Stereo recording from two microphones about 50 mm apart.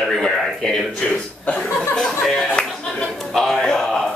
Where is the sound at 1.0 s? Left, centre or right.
Left.